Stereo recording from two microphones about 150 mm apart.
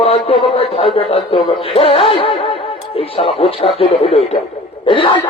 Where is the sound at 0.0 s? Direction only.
40° left (ahead or behind).